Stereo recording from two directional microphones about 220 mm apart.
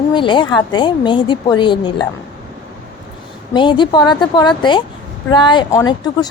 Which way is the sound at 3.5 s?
20° left (ahead or behind).